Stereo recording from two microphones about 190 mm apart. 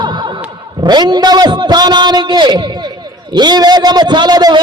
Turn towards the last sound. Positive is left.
turn(degrees=-20)  # may be behind; listen again after turning